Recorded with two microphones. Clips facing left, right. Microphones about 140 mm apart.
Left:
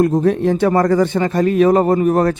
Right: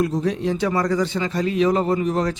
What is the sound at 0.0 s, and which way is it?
A man's voice, 55° left (ahead or behind).